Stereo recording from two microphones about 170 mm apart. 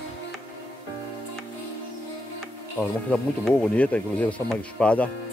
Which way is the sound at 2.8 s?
5° left (ahead or behind).